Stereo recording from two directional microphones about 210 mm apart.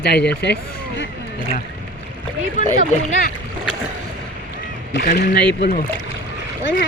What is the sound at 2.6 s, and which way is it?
Speech, 40° left (ahead or behind).